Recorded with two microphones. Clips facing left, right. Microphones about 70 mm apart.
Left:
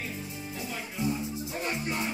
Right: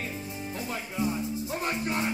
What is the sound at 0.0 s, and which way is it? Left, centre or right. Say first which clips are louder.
Music: right 2 dB; right.